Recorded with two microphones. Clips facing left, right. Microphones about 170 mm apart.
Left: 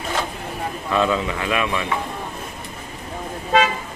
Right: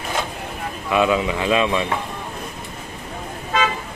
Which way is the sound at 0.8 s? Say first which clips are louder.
Right 2 dB; 15° right (ahead or behind).